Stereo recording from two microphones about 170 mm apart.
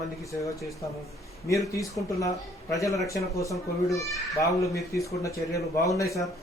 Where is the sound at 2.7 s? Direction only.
20° left (ahead or behind).